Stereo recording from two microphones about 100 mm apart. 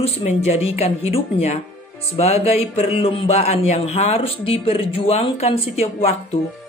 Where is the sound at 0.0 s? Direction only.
90° left.